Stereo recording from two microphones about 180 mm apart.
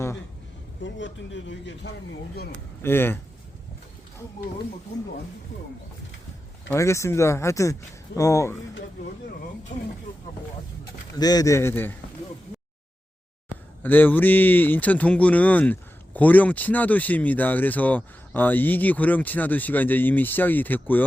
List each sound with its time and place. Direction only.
0.8 s a man's voice: 90° left
2.8 s speech: 10° left (ahead or behind)
6.7 s speech: 15° left (ahead or behind)
9.7 s speech: 45° left (ahead or behind)
11.2 s speech: 20° left (ahead or behind)
13.8 s speech: 10° left (ahead or behind)